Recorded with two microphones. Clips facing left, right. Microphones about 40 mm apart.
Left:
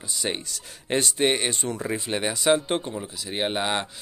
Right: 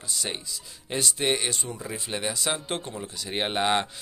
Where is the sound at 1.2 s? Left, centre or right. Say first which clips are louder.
Left 2 dB; left.